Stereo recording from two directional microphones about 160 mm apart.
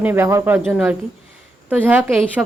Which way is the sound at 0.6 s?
Centre (ahead or behind).